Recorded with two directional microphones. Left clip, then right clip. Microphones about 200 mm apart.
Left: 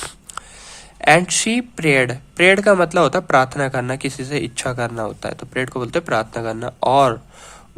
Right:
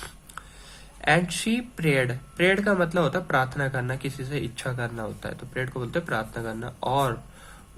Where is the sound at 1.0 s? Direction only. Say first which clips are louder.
Left 9 dB; 45° left (ahead or behind).